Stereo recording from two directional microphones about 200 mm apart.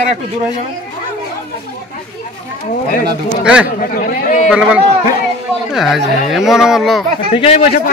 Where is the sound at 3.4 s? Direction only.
5° right (ahead or behind).